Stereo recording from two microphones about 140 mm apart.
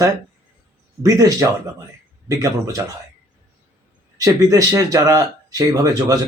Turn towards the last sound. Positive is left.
turn(degrees=-25)  # may be behind; listen again after turning